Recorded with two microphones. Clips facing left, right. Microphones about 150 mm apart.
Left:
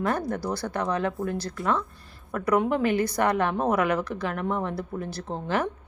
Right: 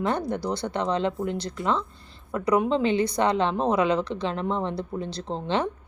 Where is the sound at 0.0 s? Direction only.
20° right (ahead or behind).